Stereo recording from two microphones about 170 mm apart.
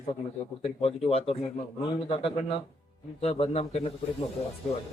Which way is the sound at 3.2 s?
35° left (ahead or behind).